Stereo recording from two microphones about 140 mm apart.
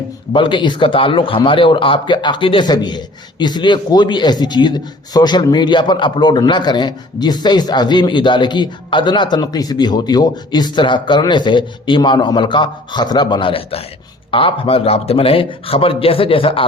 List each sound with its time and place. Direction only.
0.3 s a man's voice: 35° left (ahead or behind)